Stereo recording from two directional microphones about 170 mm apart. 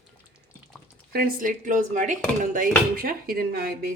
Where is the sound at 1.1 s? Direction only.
55° right (ahead or behind).